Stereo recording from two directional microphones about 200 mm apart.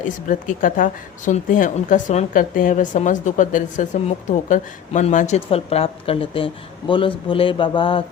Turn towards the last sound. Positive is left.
turn(degrees=25)  # may be behind; listen again after turning